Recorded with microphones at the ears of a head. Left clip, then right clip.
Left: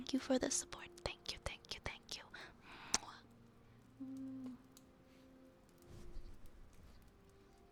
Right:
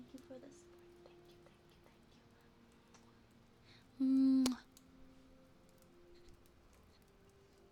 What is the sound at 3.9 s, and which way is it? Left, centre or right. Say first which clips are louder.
Humming: right 18 dB; right.